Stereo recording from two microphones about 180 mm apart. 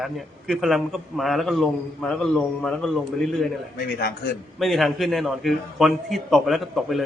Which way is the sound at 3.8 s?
60° left (ahead or behind).